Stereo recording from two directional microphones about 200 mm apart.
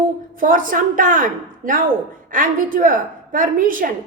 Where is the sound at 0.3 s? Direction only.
40° right (ahead or behind).